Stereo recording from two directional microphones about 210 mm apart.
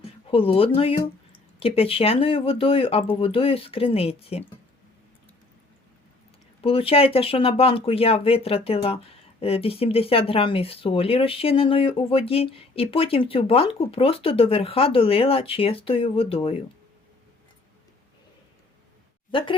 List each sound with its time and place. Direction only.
0.3 s speech: 25° left (ahead or behind)
6.6 s speech: 25° left (ahead or behind)
19.3 s a woman's voice: 25° left (ahead or behind)